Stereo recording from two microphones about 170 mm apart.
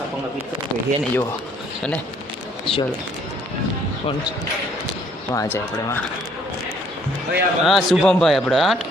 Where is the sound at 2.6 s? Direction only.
30° left (ahead or behind).